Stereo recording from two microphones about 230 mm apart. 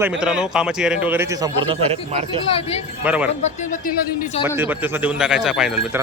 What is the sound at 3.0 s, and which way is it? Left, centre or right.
Speech, centre.